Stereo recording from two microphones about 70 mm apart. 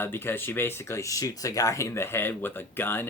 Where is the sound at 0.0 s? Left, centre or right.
Left.